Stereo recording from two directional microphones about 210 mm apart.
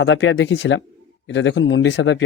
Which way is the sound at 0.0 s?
65° left (ahead or behind).